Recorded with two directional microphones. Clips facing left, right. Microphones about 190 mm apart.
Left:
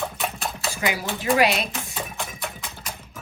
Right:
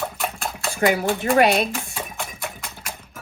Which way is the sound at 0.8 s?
55° right (ahead or behind).